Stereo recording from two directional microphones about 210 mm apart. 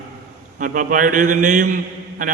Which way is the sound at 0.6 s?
40° right (ahead or behind).